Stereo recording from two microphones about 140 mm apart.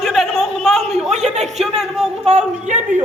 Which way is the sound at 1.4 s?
Centre (ahead or behind).